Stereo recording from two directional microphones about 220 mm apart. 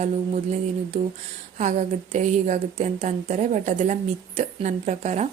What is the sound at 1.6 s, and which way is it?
Speech, 35° right (ahead or behind).